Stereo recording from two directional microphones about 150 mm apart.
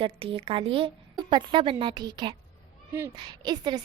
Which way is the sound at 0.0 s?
35° right (ahead or behind).